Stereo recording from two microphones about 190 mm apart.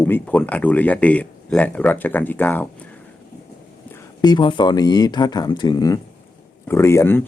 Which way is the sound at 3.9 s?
20° left (ahead or behind).